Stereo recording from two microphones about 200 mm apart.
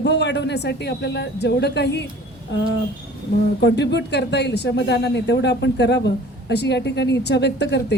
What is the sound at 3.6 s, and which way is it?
A woman's voice, 60° left (ahead or behind).